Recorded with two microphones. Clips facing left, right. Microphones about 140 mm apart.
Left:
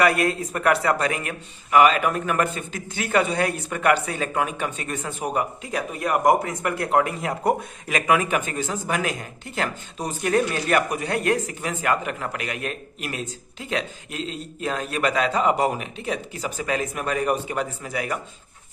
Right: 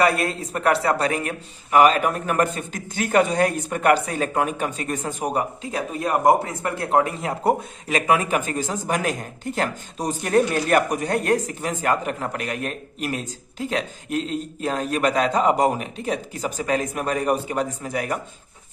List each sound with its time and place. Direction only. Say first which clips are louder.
0.0 s speech: even; 30° right (ahead or behind)